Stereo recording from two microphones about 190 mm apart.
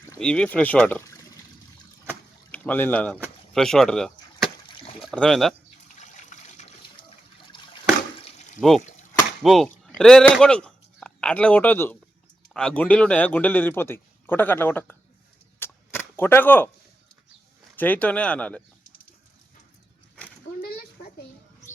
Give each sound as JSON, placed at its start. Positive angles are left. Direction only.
{"t": 0.2, "sound": "a man's voice", "side_deg": 5}
{"t": 2.5, "sound": "speech", "side_deg": 10}
{"t": 4.7, "sound": "a sound", "side_deg": 30}
{"t": 4.9, "sound": "speech", "side_deg": 5}
{"t": 6.0, "sound": "water", "side_deg": 40}
{"t": 9.4, "sound": "chop", "side_deg": 0}
{"t": 9.6, "sound": "a man's voice", "side_deg": 5}
{"t": 15.5, "sound": "cap gun", "side_deg": 10}
{"t": 17.7, "sound": "a man's voice", "side_deg": 10}
{"t": 20.6, "sound": "a sound", "side_deg": 55}